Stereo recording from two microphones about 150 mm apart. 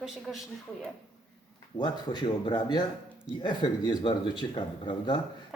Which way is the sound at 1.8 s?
30° left (ahead or behind).